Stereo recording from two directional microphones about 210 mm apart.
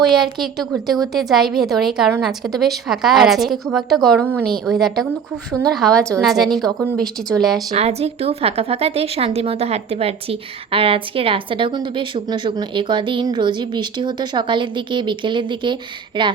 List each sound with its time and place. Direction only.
0.0 s a woman's voice: centre (ahead or behind)
7.7 s a woman's voice: 30° right (ahead or behind)